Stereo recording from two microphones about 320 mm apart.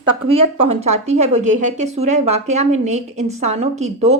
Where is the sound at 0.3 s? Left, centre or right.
Centre.